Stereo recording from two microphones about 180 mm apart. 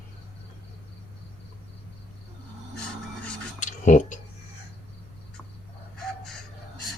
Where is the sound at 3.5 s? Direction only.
45° left (ahead or behind).